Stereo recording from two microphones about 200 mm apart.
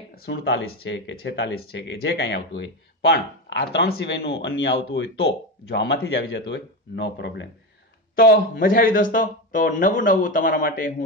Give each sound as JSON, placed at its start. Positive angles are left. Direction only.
{"t": 0.1, "sound": "speech", "side_deg": 50}
{"t": 8.2, "sound": "a man's voice", "side_deg": 45}